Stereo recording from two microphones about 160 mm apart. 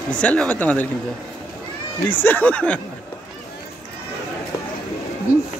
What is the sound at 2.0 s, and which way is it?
Speech, 10° left (ahead or behind).